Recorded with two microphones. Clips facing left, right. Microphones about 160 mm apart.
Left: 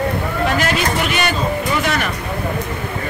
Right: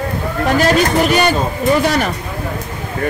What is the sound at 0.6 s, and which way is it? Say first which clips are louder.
Speech: right 6 dB; 40° right (ahead or behind).